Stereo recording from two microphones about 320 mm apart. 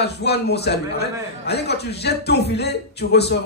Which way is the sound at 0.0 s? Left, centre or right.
Left.